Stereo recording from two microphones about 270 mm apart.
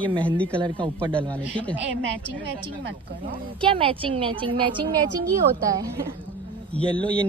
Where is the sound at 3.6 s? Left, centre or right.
Centre.